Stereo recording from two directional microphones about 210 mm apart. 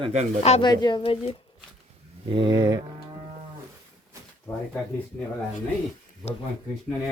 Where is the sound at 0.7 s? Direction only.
20° left (ahead or behind).